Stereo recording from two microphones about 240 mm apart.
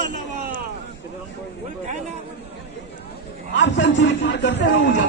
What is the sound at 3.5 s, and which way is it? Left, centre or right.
A man's voice, left.